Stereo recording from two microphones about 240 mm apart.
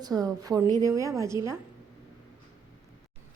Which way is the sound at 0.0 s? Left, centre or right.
Centre.